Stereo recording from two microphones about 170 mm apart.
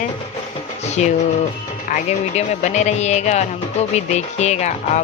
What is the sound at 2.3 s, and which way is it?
Speech, 45° left (ahead or behind).